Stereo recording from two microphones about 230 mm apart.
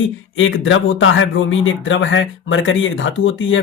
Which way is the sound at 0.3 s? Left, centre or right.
Left.